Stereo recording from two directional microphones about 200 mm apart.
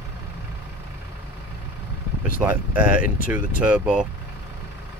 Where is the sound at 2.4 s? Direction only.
5° right (ahead or behind).